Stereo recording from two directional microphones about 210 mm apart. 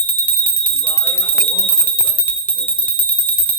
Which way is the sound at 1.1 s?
10° left (ahead or behind).